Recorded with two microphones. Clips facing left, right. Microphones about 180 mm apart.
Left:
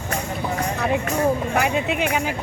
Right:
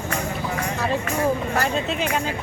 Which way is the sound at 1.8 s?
60° left (ahead or behind).